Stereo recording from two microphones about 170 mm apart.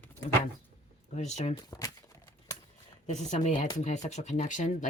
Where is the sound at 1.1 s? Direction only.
40° left (ahead or behind).